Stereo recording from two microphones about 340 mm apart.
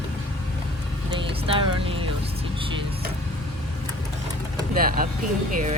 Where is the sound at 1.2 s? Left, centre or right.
Centre.